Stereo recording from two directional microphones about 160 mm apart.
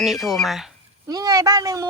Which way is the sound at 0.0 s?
Centre (ahead or behind).